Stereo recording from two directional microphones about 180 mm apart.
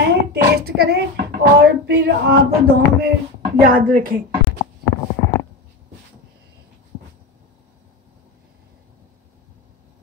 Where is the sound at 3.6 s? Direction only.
50° right (ahead or behind).